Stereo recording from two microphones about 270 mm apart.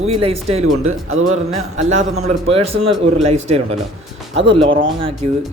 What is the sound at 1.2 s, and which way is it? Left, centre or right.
Speech, right.